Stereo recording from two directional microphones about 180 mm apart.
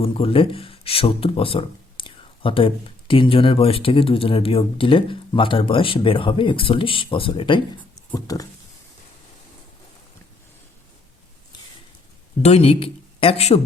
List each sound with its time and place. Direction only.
0.0 s speech: 30° left (ahead or behind)
12.4 s speech: 35° left (ahead or behind)